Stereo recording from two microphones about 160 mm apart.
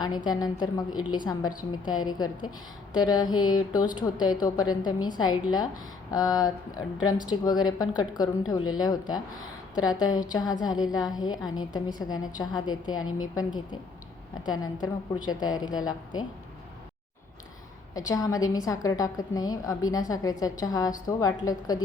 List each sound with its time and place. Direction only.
0.3 s a woman's voice: 25° left (ahead or behind)
17.9 s a woman's voice: 20° left (ahead or behind)